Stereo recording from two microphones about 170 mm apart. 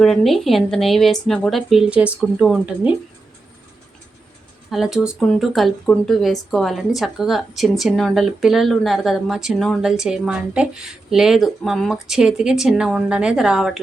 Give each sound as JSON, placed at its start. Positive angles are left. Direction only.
{"t": 0.0, "sound": "speech", "side_deg": 0}
{"t": 4.7, "sound": "speech", "side_deg": 0}